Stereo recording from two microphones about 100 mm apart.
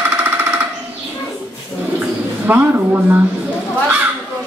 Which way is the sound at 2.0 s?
20° right (ahead or behind).